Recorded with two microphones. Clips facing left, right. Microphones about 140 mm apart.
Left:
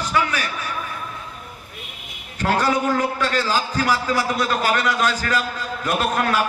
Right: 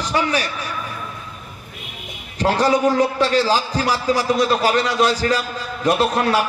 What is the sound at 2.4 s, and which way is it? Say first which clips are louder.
A man's voice: right 4 dB; 35° right (ahead or behind).